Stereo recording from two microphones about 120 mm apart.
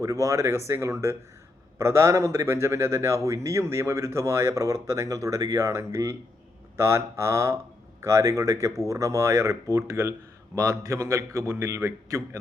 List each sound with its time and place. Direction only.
0.0 s speech: 25° right (ahead or behind)